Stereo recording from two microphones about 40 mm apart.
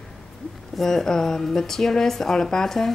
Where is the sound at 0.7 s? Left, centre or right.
Centre.